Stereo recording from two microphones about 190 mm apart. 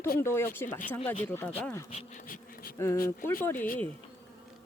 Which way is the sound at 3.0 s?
10° left (ahead or behind).